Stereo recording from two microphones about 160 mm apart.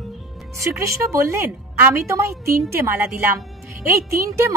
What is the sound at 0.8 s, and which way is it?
A woman's voice, 20° right (ahead or behind).